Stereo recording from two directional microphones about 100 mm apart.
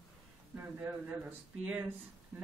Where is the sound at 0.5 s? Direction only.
20° right (ahead or behind).